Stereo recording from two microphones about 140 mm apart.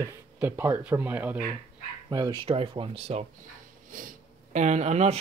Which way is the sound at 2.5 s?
45° right (ahead or behind).